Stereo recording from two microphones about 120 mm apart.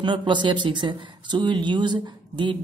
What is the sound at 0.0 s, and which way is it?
Speech, 40° right (ahead or behind).